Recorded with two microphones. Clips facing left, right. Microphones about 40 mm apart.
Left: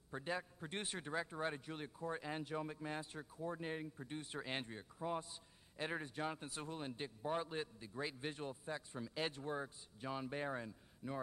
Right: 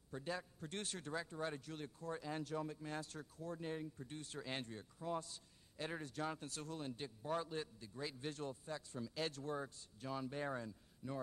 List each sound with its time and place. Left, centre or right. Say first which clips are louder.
0.1 s a man's voice: left 2 dB; left